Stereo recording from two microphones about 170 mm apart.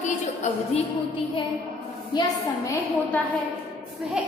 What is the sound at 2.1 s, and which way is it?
Speech, 20° left (ahead or behind).